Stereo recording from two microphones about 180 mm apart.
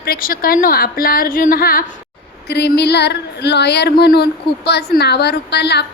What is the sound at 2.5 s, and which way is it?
Speech, 65° left (ahead or behind).